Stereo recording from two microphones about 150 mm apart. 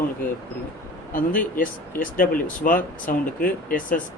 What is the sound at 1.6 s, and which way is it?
Speech, 65° left (ahead or behind).